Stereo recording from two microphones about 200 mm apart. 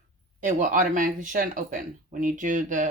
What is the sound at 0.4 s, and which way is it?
Speech, 40° right (ahead or behind).